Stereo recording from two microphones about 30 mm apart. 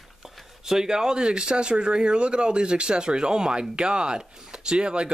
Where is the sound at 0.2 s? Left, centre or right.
Centre.